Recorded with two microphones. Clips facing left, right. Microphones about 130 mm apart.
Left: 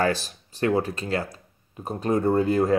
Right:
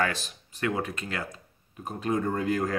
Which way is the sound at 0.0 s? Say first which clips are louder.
Left 5 dB; 35° left (ahead or behind).